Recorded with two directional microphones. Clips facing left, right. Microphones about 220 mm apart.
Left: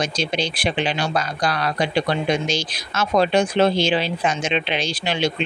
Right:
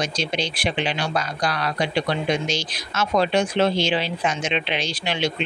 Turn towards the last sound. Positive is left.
turn(degrees=35)  # may be behind; listen again after turning